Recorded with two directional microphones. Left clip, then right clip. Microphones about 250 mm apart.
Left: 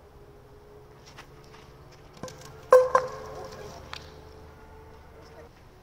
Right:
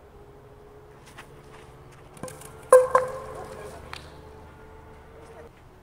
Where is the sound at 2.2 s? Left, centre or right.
Centre.